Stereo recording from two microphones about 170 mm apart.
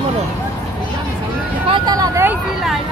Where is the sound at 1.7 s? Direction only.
25° right (ahead or behind).